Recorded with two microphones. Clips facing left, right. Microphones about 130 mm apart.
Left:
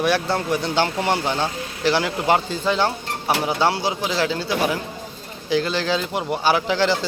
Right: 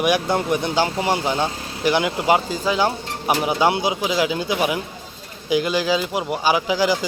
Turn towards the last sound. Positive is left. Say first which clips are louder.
# right 1 dB
turn(degrees=-10)  # may be behind; listen again after turning